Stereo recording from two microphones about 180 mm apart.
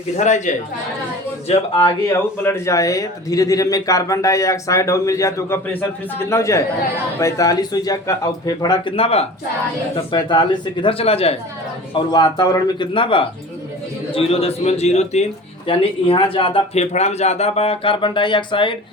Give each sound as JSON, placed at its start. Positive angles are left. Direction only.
{"t": 0.2, "sound": "a man's voice", "side_deg": 40}
{"t": 2.0, "sound": "a man's voice", "side_deg": 15}